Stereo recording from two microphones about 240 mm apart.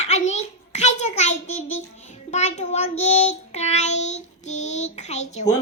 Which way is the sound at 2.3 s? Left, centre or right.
Left.